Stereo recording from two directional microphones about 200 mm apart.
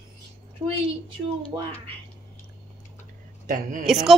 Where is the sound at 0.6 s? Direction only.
20° right (ahead or behind).